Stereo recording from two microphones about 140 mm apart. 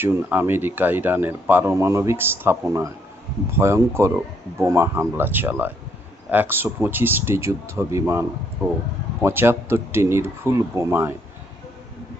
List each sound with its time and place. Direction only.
0.0 s speech: 15° right (ahead or behind)
9.2 s speech: 15° right (ahead or behind)